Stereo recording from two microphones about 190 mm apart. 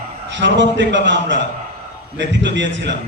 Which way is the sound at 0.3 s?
70° right (ahead or behind).